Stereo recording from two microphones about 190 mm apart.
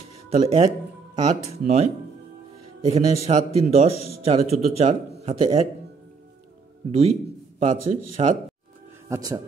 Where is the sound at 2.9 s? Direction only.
35° right (ahead or behind).